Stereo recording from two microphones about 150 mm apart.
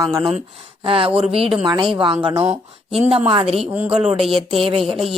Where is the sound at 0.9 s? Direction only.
35° right (ahead or behind).